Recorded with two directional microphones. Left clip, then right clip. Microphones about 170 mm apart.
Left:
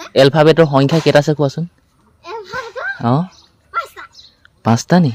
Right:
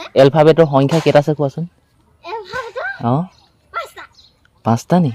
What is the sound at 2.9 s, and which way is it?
Speech, 15° left (ahead or behind).